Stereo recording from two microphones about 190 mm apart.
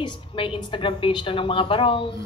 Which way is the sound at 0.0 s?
25° left (ahead or behind).